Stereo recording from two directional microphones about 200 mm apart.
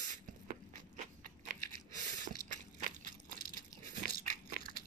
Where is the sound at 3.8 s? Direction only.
40° right (ahead or behind).